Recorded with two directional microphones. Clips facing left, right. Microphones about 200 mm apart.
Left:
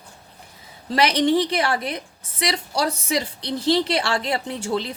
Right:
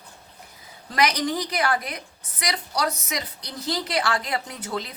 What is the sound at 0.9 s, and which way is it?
A woman's voice, 30° left (ahead or behind).